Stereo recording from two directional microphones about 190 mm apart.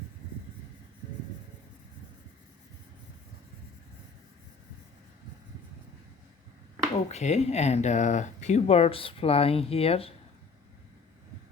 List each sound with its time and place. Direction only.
7.1 s speech: 35° left (ahead or behind)